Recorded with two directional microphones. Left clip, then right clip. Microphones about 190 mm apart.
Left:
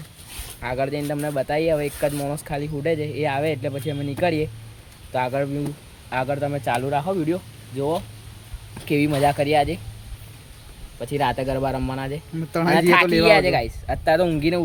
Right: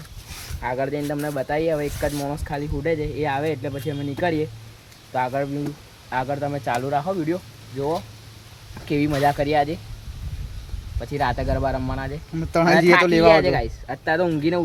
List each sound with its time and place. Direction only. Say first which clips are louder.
0.6 s speech: even; 10° left (ahead or behind)
11.0 s speech: left 1 dB; 10° left (ahead or behind)
12.4 s speech: right 4 dB; 25° right (ahead or behind)
13.2 s speech: right 1 dB; 5° left (ahead or behind)